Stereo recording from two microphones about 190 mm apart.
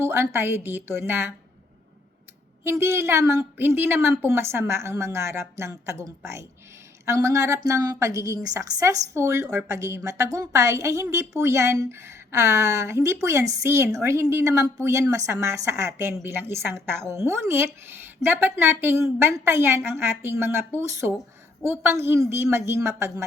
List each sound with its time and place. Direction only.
0.0 s a woman's voice: 15° right (ahead or behind)
2.6 s a woman's voice: 15° right (ahead or behind)